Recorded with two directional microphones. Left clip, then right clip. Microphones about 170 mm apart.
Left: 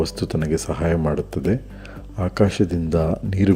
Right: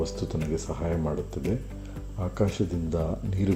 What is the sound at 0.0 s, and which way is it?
Speech, 40° left (ahead or behind).